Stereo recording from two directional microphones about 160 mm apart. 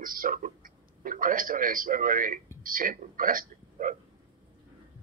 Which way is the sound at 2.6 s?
60° right (ahead or behind).